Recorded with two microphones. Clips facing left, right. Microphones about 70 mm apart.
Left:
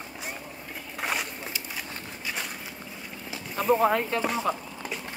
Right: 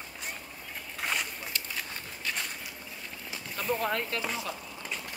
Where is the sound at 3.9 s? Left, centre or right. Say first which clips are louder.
Left 6 dB; left.